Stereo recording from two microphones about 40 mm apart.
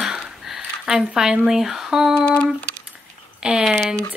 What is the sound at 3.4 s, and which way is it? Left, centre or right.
Speech, centre.